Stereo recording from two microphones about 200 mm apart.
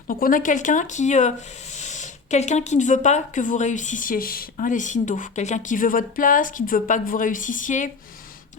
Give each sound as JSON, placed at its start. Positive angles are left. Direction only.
{"t": 0.1, "sound": "speech", "side_deg": 45}